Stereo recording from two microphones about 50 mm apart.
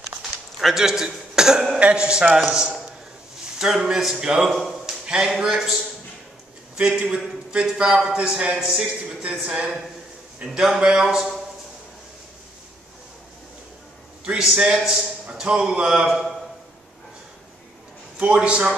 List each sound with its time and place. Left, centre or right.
0.2 s cough: centre
1.8 s a man's voice: right
3.5 s a man's voice: centre
6.8 s speech: right
7.6 s speech: centre
8.1 s a man's voice: centre
14.4 s a man's voice: centre
18.2 s speech: centre